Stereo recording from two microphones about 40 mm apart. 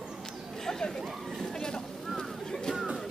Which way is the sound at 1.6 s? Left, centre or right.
Centre.